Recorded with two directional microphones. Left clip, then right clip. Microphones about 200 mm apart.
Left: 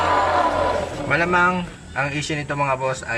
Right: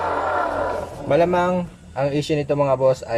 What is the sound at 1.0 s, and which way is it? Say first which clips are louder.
Speech: right 1 dB; 25° right (ahead or behind).